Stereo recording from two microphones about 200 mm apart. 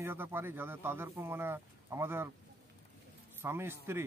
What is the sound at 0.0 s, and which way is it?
A man's voice, 10° right (ahead or behind).